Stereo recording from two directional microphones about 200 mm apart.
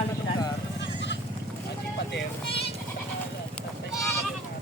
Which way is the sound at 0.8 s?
60° left (ahead or behind).